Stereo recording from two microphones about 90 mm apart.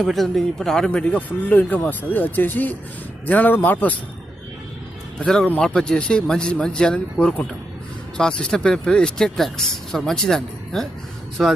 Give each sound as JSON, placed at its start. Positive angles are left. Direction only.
{"t": 0.0, "sound": "speech", "side_deg": 0}
{"t": 0.9, "sound": "speech", "side_deg": 15}
{"t": 5.2, "sound": "speech", "side_deg": 5}